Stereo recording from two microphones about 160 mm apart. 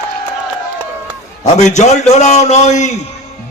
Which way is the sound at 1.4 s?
45° left (ahead or behind).